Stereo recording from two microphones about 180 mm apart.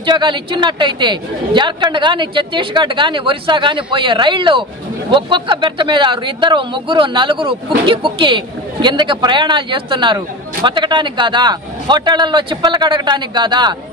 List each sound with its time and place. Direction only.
0.0 s speech: 25° right (ahead or behind)